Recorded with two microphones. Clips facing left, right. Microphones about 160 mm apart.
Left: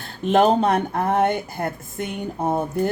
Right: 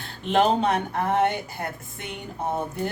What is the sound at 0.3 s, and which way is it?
Speech, 45° left (ahead or behind).